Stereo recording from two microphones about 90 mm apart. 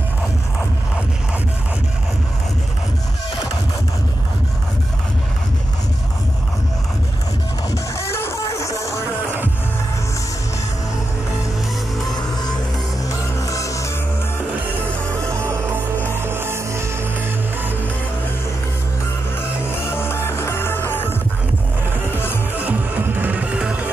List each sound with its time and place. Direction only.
7.7 s music: 30° left (ahead or behind)
13.1 s music: 35° left (ahead or behind)
15.0 s music: 35° right (ahead or behind)
19.7 s music: 25° left (ahead or behind)
22.5 s music: 20° right (ahead or behind)